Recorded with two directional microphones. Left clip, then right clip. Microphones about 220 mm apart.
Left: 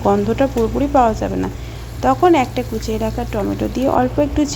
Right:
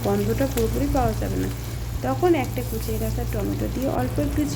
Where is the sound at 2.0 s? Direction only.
20° left (ahead or behind).